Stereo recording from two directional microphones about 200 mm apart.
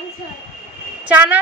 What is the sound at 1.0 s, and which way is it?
Speech, 5° right (ahead or behind).